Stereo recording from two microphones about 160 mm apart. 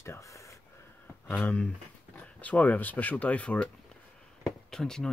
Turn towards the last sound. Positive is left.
turn(degrees=5)  # may be behind; listen again after turning